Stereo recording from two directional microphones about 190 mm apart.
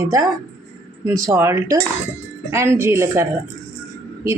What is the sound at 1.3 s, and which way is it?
A woman's voice, 15° right (ahead or behind).